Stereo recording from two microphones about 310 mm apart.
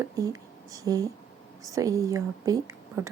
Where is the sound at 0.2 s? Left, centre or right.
Centre.